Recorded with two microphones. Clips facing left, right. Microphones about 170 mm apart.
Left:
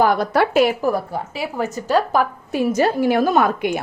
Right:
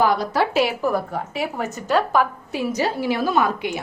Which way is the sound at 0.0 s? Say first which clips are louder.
Left 3 dB; 50° left (ahead or behind).